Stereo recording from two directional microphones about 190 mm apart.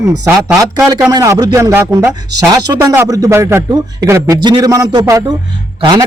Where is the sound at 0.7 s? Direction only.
20° right (ahead or behind).